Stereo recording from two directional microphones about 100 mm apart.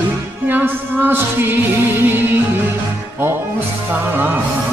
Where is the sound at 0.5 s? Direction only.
20° right (ahead or behind).